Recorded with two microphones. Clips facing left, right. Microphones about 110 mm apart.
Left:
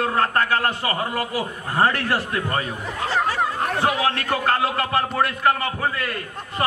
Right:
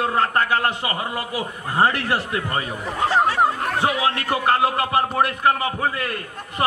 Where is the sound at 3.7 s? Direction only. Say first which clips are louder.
Left 2 dB; 20° right (ahead or behind).